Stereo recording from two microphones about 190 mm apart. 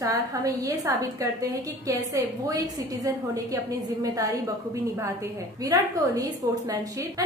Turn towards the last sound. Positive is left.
turn(degrees=-20)  # may be behind; listen again after turning